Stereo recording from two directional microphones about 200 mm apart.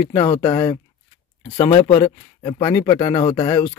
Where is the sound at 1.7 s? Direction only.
30° left (ahead or behind).